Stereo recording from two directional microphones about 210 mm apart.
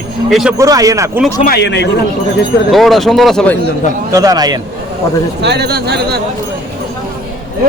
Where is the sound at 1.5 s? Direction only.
55° left (ahead or behind).